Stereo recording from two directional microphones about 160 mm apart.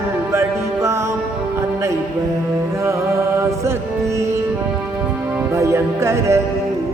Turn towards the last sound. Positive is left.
turn(degrees=-15)  # may be behind; listen again after turning